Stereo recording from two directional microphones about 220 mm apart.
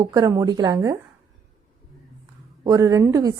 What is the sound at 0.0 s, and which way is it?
Speech, 15° right (ahead or behind).